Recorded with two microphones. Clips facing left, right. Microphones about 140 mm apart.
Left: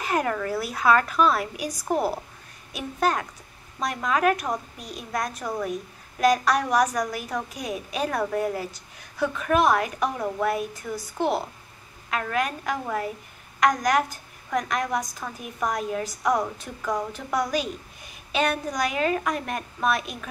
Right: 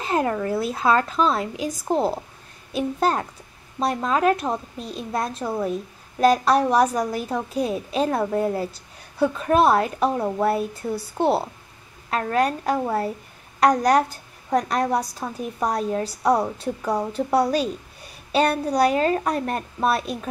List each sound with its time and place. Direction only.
0.0 s a woman's voice: 25° right (ahead or behind)